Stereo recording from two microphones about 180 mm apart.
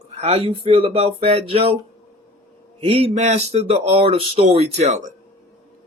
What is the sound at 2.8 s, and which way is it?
Speech, 30° right (ahead or behind).